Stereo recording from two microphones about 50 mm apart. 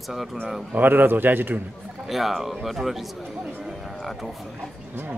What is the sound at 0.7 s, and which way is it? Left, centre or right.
Speech, right.